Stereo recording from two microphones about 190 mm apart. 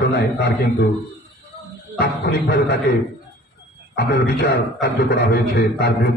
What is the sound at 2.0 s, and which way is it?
Speech, 60° left (ahead or behind).